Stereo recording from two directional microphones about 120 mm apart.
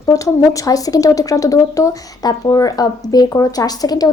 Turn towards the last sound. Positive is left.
turn(degrees=30)  # may be behind; listen again after turning